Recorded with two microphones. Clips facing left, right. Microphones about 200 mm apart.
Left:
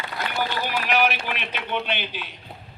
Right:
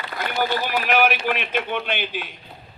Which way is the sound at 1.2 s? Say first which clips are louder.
Right 7 dB; 50° right (ahead or behind).